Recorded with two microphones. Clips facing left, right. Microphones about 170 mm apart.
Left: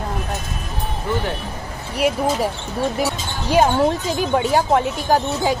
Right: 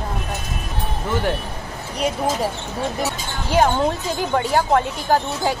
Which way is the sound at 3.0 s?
15° left (ahead or behind).